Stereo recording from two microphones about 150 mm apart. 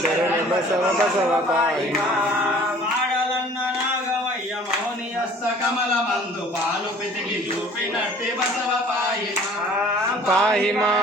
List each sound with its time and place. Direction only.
10.2 s music: 5° left (ahead or behind)